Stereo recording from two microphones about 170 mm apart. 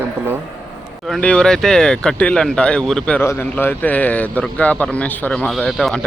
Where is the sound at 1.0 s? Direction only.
5° left (ahead or behind).